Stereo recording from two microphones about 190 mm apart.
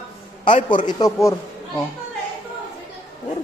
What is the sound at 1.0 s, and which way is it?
Speech, 15° left (ahead or behind).